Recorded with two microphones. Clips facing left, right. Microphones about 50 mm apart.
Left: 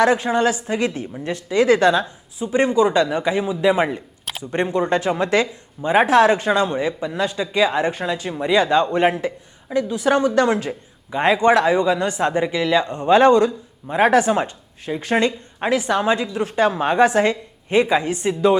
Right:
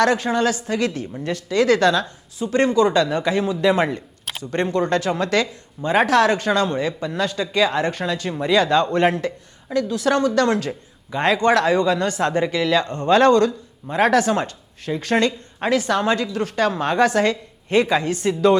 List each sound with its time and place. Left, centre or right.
0.0 s a woman's voice: centre